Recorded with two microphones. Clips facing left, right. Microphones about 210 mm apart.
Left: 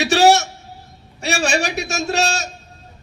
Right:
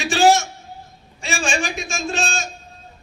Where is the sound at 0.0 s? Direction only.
70° left (ahead or behind).